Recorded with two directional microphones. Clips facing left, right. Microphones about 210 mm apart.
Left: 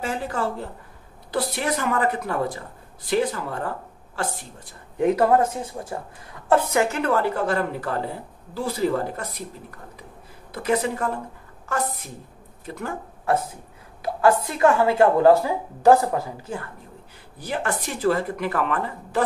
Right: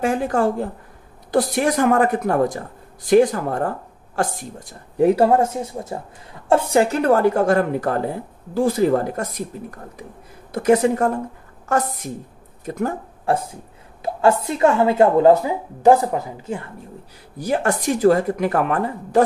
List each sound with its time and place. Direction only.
0.0 s speech: 50° right (ahead or behind)
10.5 s speech: 45° right (ahead or behind)
12.6 s speech: 45° right (ahead or behind)
13.2 s speech: 30° right (ahead or behind)
17.4 s speech: 45° right (ahead or behind)